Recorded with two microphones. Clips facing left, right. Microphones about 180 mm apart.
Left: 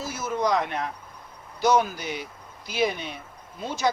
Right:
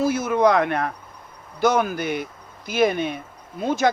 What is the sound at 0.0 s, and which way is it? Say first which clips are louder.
Speech: right 9 dB; 60° right (ahead or behind).